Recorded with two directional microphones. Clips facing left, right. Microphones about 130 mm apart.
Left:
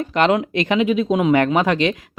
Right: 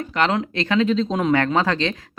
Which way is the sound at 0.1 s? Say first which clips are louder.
Left 4 dB; 20° left (ahead or behind).